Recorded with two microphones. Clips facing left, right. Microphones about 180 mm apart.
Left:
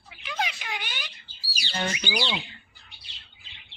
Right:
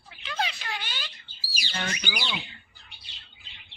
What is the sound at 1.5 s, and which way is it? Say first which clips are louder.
Speech: left 3 dB; 30° left (ahead or behind).